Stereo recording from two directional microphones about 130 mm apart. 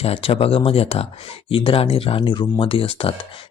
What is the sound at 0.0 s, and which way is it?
Speech, 45° left (ahead or behind).